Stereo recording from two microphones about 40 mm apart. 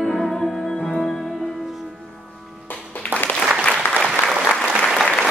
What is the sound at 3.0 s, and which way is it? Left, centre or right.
Applause, left.